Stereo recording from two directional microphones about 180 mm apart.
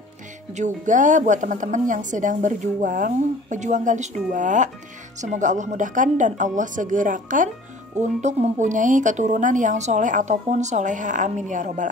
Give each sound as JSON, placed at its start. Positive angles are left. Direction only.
{"t": 0.6, "sound": "speech", "side_deg": -45}